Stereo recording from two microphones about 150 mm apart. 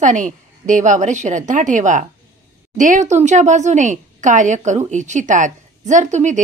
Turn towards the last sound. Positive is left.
turn(degrees=-55)  # may be behind; listen again after turning